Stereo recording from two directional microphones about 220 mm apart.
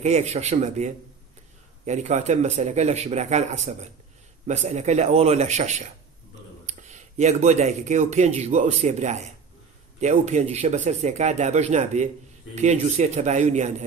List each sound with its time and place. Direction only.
0.0 s a man's voice: 30° right (ahead or behind)